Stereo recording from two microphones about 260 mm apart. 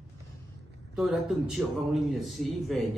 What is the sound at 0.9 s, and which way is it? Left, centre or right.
A man's voice, centre.